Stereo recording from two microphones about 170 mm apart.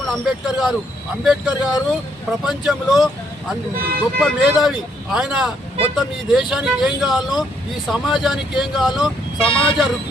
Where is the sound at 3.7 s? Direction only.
60° right (ahead or behind).